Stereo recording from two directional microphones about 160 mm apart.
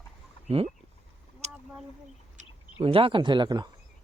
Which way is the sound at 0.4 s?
40° right (ahead or behind).